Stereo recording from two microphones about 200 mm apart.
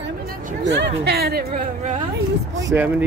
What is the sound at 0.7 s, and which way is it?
Speech, 55° right (ahead or behind).